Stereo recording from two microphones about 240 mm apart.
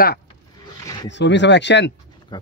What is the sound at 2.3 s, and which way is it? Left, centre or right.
Speech, centre.